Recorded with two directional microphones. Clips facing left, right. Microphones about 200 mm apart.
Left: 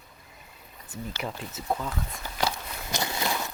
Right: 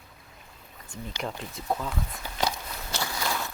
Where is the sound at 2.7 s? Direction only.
15° left (ahead or behind).